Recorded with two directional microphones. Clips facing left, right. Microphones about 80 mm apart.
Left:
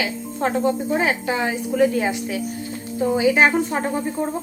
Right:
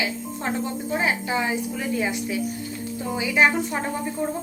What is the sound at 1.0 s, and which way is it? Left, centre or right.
A woman's voice, left.